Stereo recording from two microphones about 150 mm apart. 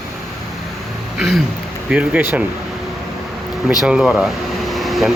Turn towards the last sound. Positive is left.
turn(degrees=0)  # may be behind; listen again after turning